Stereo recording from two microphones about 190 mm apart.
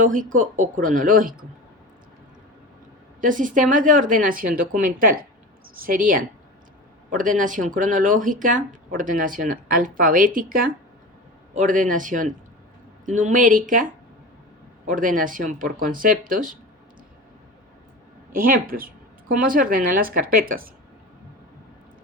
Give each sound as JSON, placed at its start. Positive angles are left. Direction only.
{"t": 0.0, "sound": "speech", "side_deg": -45}
{"t": 3.2, "sound": "speech", "side_deg": -45}
{"t": 18.3, "sound": "speech", "side_deg": -45}